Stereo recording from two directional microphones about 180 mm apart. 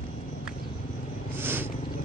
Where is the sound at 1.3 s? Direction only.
10° right (ahead or behind).